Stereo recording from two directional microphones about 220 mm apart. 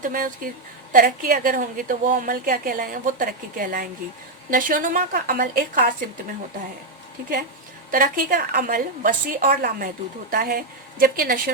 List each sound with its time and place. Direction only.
0.0 s a woman's voice: 40° right (ahead or behind)
7.9 s a woman's voice: 40° right (ahead or behind)